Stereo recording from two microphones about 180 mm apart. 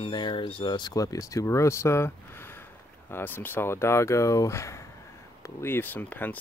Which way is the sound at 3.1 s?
10° left (ahead or behind).